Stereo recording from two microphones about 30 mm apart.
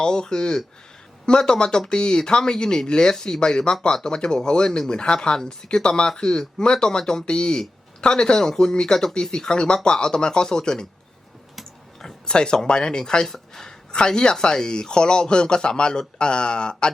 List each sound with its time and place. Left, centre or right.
0.0 s speech: left
8.3 s speech: left
11.9 s a sound: left
12.6 s speech: left
13.2 s speech: centre
13.9 s speech: left